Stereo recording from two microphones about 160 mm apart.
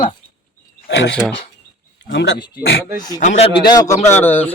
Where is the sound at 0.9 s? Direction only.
90° left.